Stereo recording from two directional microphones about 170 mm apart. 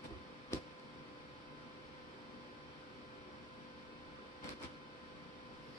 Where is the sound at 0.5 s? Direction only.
15° left (ahead or behind).